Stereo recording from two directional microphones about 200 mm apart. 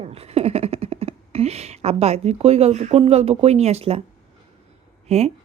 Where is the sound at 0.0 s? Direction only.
30° right (ahead or behind).